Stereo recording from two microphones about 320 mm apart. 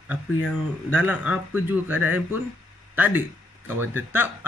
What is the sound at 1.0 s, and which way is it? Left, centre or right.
Speech, centre.